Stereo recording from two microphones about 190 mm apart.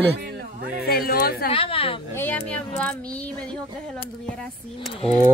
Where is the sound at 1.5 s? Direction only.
30° left (ahead or behind).